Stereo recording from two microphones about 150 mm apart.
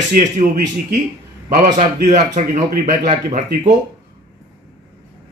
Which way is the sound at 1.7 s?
55° right (ahead or behind).